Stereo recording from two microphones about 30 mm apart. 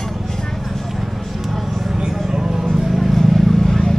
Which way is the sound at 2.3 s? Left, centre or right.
Centre.